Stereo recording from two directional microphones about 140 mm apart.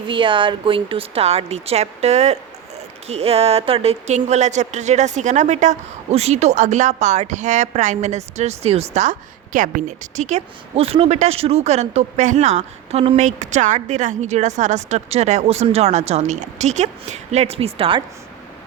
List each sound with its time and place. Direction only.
0.1 s a woman's voice: 35° right (ahead or behind)